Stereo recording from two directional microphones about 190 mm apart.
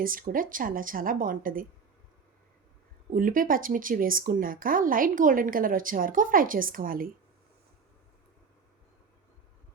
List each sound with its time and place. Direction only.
0.0 s speech: 45° right (ahead or behind)
3.1 s speech: 45° right (ahead or behind)